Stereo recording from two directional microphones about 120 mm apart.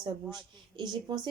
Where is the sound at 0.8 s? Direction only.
35° right (ahead or behind).